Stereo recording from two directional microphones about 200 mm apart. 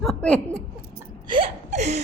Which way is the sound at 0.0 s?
5° left (ahead or behind).